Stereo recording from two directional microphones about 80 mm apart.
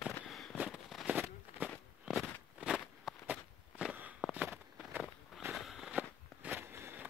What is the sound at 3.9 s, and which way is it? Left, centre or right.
Walk, centre.